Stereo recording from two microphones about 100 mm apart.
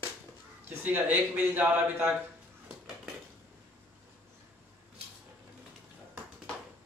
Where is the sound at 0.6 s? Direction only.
20° right (ahead or behind).